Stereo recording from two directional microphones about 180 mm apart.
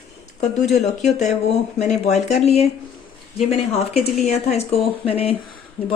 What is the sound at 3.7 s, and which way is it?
Speech, 35° left (ahead or behind).